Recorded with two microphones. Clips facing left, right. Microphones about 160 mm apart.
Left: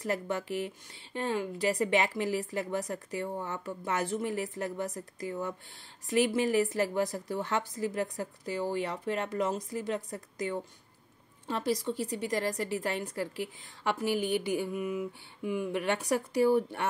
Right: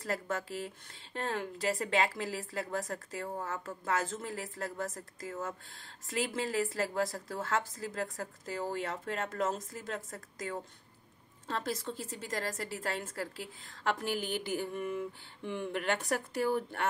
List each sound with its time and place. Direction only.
0.0 s a woman's voice: 15° left (ahead or behind)